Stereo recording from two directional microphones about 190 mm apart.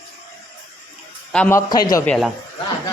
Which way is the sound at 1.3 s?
10° left (ahead or behind).